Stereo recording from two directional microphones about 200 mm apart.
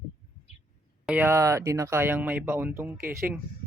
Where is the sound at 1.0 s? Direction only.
5° right (ahead or behind).